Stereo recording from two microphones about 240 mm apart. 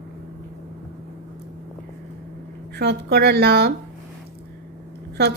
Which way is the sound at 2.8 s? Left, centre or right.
Right.